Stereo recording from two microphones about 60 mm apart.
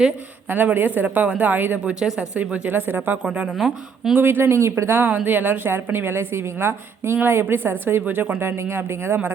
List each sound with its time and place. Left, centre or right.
0.4 s a woman's voice: right
2.0 s speech: centre
2.4 s speech: right
3.2 s speech: centre
3.5 s a woman's voice: centre
4.1 s a woman's voice: right
5.1 s a woman's voice: right